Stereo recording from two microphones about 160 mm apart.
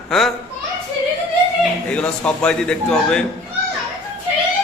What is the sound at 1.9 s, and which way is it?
A man's voice, 5° left (ahead or behind).